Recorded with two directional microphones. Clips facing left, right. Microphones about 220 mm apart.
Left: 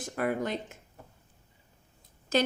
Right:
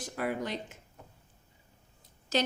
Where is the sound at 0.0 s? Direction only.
50° left (ahead or behind).